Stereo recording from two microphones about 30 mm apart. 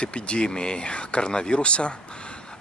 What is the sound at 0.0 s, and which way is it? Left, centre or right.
Speech, left.